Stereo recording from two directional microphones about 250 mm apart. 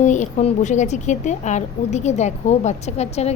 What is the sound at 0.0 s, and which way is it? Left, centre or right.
A woman's voice, left.